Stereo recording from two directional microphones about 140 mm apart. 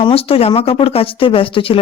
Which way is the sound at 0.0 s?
45° left (ahead or behind).